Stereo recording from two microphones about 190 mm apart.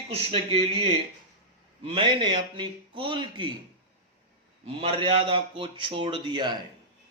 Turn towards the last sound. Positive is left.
turn(degrees=-25)  # may be behind; listen again after turning